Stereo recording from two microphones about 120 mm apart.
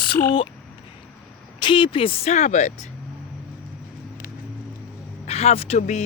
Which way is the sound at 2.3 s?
75° left (ahead or behind).